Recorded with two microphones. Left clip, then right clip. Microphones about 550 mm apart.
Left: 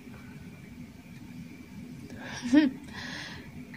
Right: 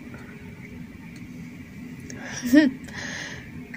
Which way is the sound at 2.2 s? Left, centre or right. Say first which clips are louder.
Right 6 dB; left.